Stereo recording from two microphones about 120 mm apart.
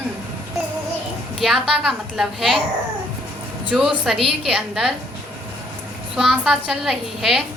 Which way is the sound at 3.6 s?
Centre (ahead or behind).